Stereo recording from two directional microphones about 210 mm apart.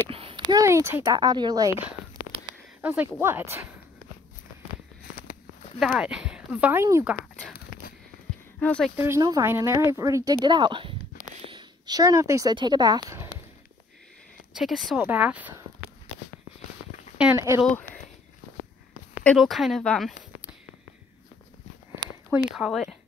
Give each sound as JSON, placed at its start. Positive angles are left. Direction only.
{"t": 0.1, "sound": "a sound", "side_deg": -25}
{"t": 0.5, "sound": "speech", "side_deg": -15}
{"t": 5.8, "sound": "speech", "side_deg": 0}
{"t": 8.5, "sound": "speech", "side_deg": 5}
{"t": 8.9, "sound": "speech", "side_deg": -10}
{"t": 14.5, "sound": "speech", "side_deg": 0}
{"t": 17.2, "sound": "speech", "side_deg": -10}
{"t": 19.2, "sound": "speech", "side_deg": 0}
{"t": 22.3, "sound": "speech", "side_deg": -5}